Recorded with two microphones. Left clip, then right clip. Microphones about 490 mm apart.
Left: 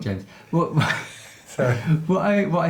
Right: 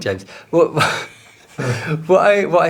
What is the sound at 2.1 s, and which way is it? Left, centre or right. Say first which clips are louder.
Speech: right 10 dB; right.